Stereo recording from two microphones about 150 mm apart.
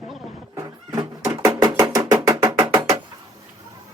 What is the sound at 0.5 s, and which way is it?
Music, 25° right (ahead or behind).